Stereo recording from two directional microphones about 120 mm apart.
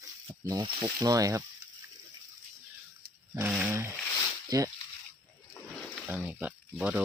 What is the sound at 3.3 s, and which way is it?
Speech, 25° right (ahead or behind).